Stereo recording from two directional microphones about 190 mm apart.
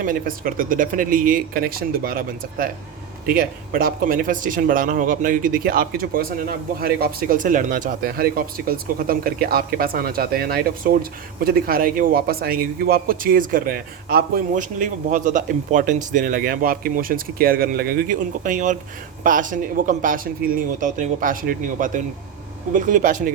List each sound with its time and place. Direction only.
0.0 s speech: 45° right (ahead or behind)